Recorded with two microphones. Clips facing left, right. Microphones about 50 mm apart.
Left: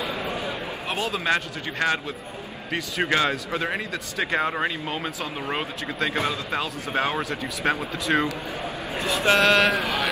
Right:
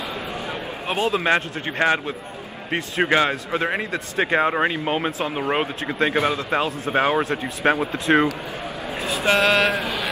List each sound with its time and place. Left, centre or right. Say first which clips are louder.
0.8 s a man's voice: right 5 dB; right
9.3 s a sound: right 1 dB; centre
9.7 s a man's voice: even; right